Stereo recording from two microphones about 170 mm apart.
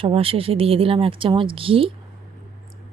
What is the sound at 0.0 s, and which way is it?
A woman's voice, 35° right (ahead or behind).